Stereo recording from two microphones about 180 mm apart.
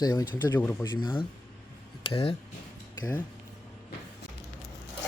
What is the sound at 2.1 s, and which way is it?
Speech, 35° left (ahead or behind).